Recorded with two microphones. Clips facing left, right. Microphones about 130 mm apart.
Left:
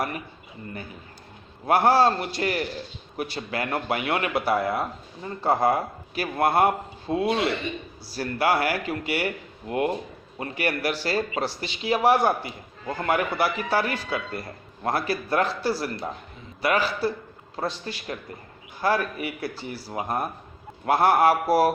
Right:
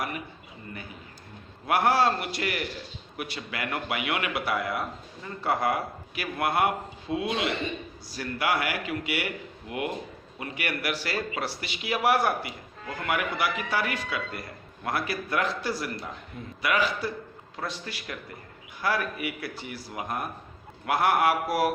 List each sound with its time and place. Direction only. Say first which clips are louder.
1.6 s a man's voice: left 4 dB; 30° left (ahead or behind)